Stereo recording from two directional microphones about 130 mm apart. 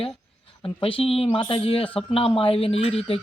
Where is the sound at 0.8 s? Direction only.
45° left (ahead or behind).